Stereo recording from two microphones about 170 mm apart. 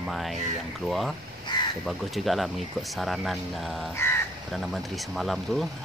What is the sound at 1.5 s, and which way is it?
Crow, 25° left (ahead or behind).